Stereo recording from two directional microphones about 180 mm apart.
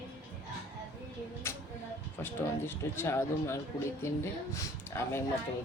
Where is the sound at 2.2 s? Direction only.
15° left (ahead or behind).